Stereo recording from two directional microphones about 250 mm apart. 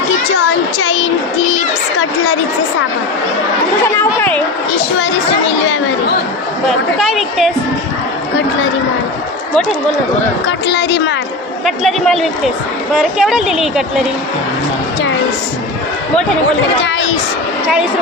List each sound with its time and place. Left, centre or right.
0.8 s speech: left
3.9 s speech: centre
6.7 s speech: centre
10.4 s speech: left
11.6 s speech: centre